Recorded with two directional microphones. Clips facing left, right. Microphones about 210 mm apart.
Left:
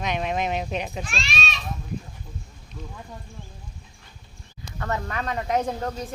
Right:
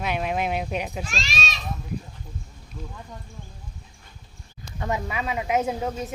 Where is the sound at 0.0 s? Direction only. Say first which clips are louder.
Even; 5° right (ahead or behind).